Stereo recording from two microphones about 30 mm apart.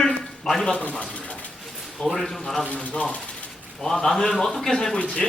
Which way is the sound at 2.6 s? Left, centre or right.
Left.